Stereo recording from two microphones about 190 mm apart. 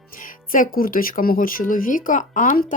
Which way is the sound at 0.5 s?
50° left (ahead or behind).